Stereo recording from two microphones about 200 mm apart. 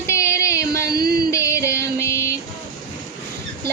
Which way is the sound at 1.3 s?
15° left (ahead or behind).